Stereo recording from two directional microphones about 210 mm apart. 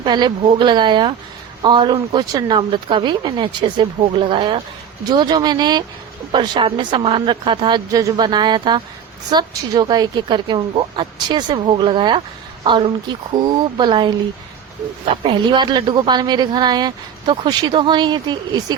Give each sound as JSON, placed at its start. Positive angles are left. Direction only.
{"t": 0.0, "sound": "a woman's voice", "side_deg": -20}
{"t": 15.1, "sound": "a woman's voice", "side_deg": -25}